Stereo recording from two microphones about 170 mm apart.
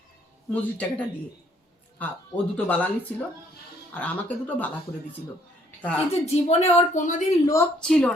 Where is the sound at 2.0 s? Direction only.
10° left (ahead or behind).